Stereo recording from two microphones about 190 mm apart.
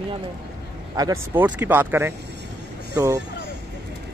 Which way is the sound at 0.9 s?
15° right (ahead or behind).